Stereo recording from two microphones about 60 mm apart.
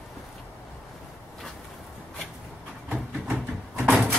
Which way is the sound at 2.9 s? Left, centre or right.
Right.